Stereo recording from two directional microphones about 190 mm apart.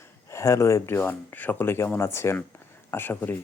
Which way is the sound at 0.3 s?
15° left (ahead or behind).